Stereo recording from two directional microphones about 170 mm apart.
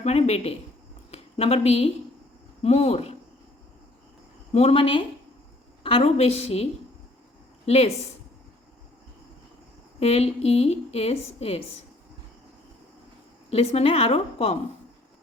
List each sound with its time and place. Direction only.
0.0 s a woman's voice: 40° left (ahead or behind)
4.5 s a woman's voice: 35° left (ahead or behind)
10.0 s a woman's voice: 35° left (ahead or behind)
13.5 s a woman's voice: 35° left (ahead or behind)